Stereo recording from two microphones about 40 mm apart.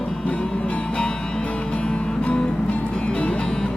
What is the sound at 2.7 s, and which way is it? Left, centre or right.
Music, left.